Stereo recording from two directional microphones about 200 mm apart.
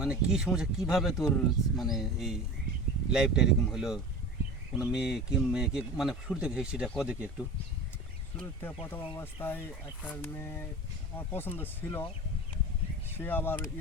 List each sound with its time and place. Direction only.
0.0 s speech: 5° right (ahead or behind)
8.4 s speech: 10° left (ahead or behind)
13.1 s speech: 10° left (ahead or behind)